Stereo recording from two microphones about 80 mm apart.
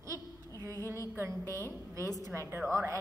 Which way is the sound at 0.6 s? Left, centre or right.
Right.